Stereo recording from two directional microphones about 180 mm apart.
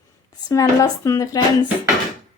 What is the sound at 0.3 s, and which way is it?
A woman's voice, 20° left (ahead or behind).